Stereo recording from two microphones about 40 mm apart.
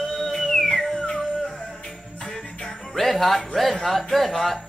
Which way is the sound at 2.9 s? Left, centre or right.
Centre.